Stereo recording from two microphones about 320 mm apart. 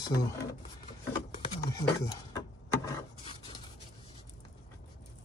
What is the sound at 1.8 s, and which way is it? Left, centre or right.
Speech, centre.